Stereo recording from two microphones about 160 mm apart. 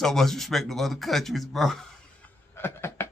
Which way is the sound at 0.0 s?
Centre (ahead or behind).